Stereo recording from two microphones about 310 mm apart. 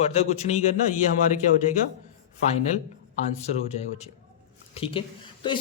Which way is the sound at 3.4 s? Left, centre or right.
Left.